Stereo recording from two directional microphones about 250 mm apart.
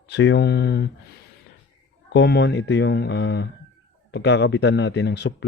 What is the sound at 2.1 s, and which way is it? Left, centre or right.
Speech, left.